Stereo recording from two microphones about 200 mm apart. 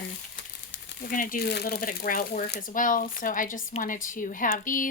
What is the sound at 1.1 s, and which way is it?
Speech, 45° left (ahead or behind).